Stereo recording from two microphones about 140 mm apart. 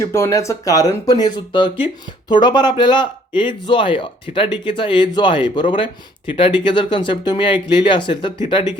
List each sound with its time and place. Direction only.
0.0 s speech: 20° left (ahead or behind)